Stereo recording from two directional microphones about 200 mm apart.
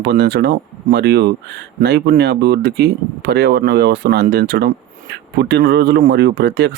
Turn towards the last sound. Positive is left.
turn(degrees=-55)  # may be behind; listen again after turning